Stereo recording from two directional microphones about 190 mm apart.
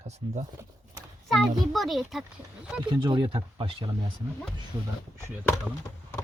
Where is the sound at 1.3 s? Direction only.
Centre (ahead or behind).